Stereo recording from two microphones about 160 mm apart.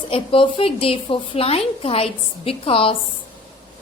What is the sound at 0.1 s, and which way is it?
A woman's voice, 35° left (ahead or behind).